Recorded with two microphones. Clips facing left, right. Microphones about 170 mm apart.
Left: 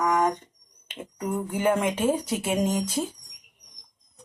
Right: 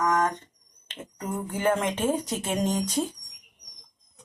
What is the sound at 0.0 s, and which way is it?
Fire alarm, 15° left (ahead or behind).